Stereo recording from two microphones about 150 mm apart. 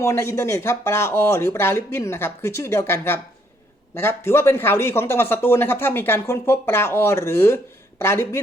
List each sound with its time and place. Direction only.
0.0 s speech: 15° left (ahead or behind)